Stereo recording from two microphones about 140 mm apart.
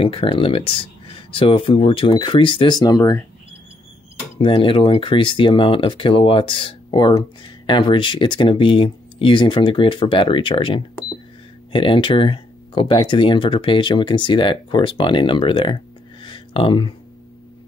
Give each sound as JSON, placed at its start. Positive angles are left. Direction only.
{"t": 0.0, "sound": "speech", "side_deg": 40}
{"t": 4.4, "sound": "speech", "side_deg": 35}